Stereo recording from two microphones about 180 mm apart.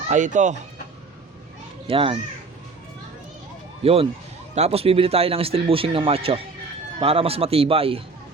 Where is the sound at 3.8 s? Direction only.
30° right (ahead or behind).